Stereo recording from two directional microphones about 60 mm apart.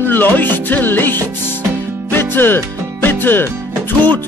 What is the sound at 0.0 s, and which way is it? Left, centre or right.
Music, left.